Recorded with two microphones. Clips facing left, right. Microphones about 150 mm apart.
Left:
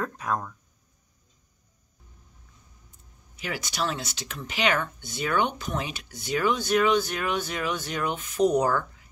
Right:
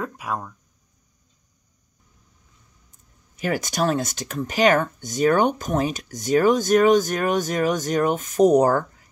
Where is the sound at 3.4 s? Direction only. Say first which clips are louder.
Right 8 dB; 50° right (ahead or behind).